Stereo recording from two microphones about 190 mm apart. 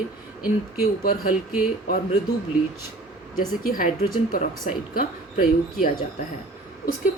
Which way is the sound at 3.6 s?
50° left (ahead or behind).